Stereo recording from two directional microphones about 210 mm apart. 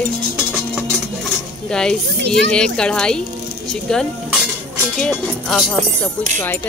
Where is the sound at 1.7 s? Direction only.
5° left (ahead or behind).